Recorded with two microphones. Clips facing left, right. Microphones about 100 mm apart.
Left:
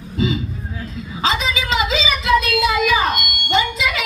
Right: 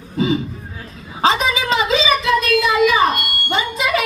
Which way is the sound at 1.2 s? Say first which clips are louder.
Right 4 dB; 50° right (ahead or behind).